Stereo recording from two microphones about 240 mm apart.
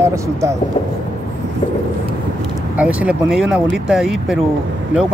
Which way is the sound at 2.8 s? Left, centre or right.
Centre.